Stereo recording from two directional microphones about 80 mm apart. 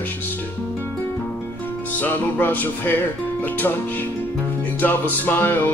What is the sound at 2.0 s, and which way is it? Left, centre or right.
Music, left.